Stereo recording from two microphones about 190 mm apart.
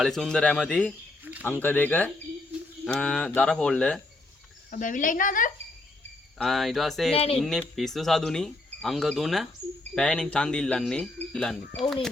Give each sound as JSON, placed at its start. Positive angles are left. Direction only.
{"t": 0.0, "sound": "speech", "side_deg": 0}
{"t": 4.7, "sound": "a woman's voice", "side_deg": 45}
{"t": 6.4, "sound": "speech", "side_deg": 0}
{"t": 7.1, "sound": "speech", "side_deg": 30}
{"t": 7.8, "sound": "speech", "side_deg": 0}